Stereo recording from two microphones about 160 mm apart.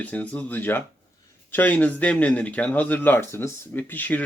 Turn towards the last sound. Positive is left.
turn(degrees=10)  # may be behind; listen again after turning